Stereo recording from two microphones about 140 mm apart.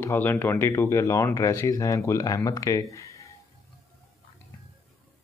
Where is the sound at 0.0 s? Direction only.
15° left (ahead or behind).